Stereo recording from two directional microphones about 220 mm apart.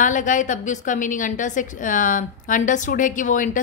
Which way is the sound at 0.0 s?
35° left (ahead or behind).